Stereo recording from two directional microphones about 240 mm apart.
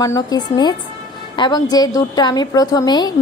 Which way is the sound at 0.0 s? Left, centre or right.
Centre.